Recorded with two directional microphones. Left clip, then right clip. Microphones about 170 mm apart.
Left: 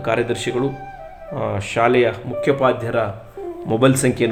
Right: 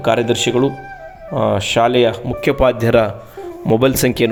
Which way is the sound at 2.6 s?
60° right (ahead or behind).